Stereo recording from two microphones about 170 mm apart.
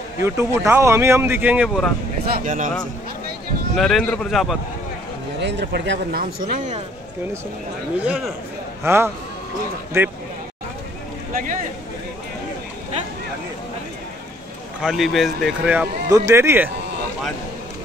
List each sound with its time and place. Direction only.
0.2 s speech: 15° right (ahead or behind)
2.3 s speech: 50° right (ahead or behind)
3.7 s speech: centre (ahead or behind)
5.4 s speech: 90° right; by 6.5 s 70° right (ahead or behind)
8.0 s speech: 5° right (ahead or behind)
11.3 s speech: 50° right (ahead or behind)
14.8 s speech: centre (ahead or behind)